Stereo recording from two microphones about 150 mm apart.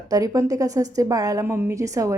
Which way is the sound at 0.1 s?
25° right (ahead or behind).